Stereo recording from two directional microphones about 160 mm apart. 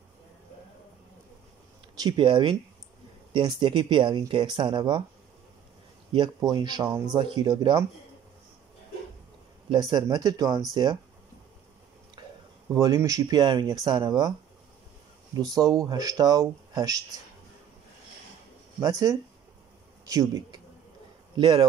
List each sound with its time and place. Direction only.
2.0 s speech: 30° right (ahead or behind)
6.1 s speech: 25° right (ahead or behind)
9.7 s speech: 25° right (ahead or behind)
12.2 s a sound: 30° right (ahead or behind)
12.7 s speech: 20° right (ahead or behind)
15.3 s speech: 25° right (ahead or behind)
18.8 s speech: 20° right (ahead or behind)